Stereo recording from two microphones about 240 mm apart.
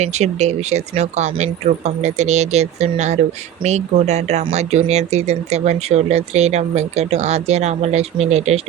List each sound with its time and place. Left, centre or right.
0.0 s speech: right